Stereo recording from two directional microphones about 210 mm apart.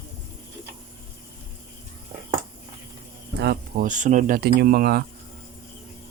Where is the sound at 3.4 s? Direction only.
45° right (ahead or behind).